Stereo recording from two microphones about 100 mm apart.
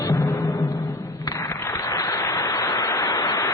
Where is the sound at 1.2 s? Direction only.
35° left (ahead or behind).